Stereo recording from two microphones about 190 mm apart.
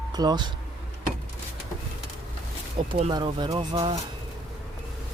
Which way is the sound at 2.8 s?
30° right (ahead or behind).